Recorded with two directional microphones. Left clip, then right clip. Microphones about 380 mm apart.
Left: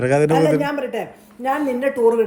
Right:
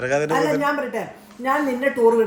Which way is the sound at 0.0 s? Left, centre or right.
Centre.